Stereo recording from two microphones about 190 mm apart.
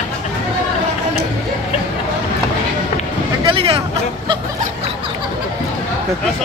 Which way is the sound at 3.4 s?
30° right (ahead or behind).